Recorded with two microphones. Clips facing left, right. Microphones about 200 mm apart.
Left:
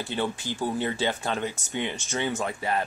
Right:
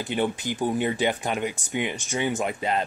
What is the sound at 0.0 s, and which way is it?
Speech, 15° right (ahead or behind).